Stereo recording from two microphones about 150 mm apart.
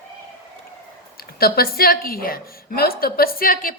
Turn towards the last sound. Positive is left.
turn(degrees=70)  # may be behind; listen again after turning